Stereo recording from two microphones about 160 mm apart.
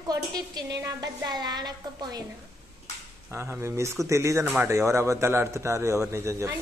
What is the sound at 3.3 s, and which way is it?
A woman's voice, 15° right (ahead or behind).